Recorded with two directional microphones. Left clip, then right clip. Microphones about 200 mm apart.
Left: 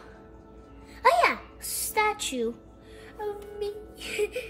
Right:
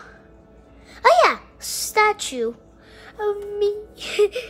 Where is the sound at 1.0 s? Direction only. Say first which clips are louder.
Right 7 dB; 20° right (ahead or behind).